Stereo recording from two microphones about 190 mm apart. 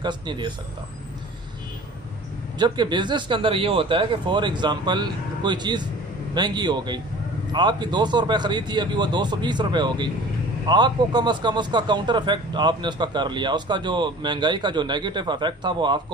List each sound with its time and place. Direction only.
0.0 s a man's voice: 25° right (ahead or behind)
2.6 s a man's voice: 25° right (ahead or behind)